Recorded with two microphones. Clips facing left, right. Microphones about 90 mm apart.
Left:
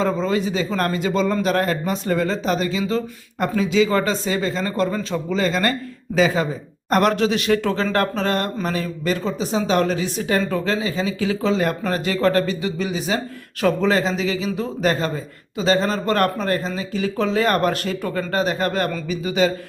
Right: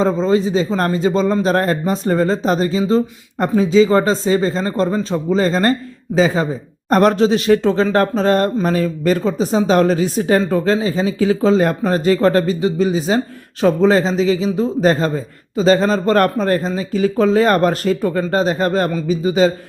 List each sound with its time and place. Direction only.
0.0 s speech: 30° right (ahead or behind)